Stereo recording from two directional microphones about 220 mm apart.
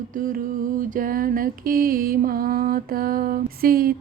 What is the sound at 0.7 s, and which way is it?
Mantra, 40° right (ahead or behind).